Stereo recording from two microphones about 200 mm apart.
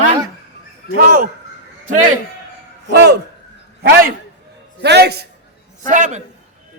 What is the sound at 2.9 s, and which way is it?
Speech, 55° right (ahead or behind).